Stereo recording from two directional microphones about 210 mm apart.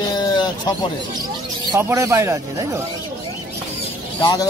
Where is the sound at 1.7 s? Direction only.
15° right (ahead or behind).